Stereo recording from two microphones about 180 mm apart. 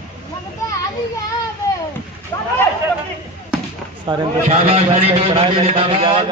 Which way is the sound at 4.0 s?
25° right (ahead or behind).